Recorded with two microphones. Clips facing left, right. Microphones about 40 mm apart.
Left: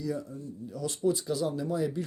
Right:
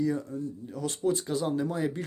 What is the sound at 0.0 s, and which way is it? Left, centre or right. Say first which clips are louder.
Speech: right 5 dB; right.